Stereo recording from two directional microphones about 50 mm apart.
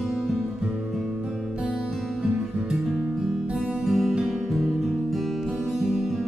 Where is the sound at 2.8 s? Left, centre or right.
Centre.